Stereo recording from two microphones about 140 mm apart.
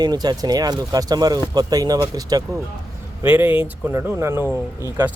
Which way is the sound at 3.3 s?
15° right (ahead or behind).